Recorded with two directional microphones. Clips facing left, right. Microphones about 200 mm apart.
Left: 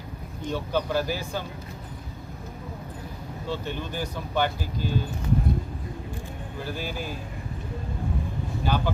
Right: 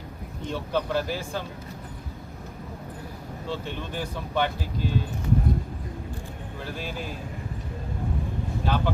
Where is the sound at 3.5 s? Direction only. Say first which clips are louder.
Left 1 dB; centre (ahead or behind).